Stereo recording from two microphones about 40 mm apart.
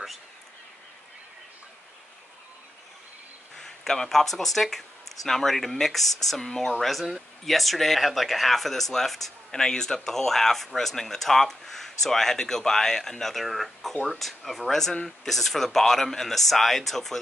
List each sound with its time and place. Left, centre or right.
3.5 s speech: centre
6.4 s speech: centre
6.8 s speech: centre
9.5 s speech: centre